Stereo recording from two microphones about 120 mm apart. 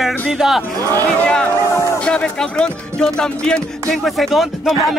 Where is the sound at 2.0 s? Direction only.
5° left (ahead or behind).